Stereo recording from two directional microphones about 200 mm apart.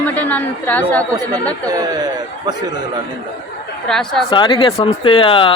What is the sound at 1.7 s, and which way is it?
Speech, 20° right (ahead or behind).